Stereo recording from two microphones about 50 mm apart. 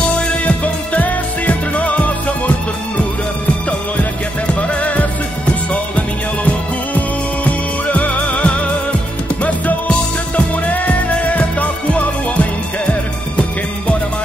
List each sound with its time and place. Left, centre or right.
0.0 s music: left
4.6 s music: left
9.8 s music: left